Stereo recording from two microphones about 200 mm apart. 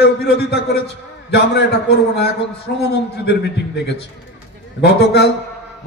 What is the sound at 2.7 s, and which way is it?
A man's voice, 55° left (ahead or behind).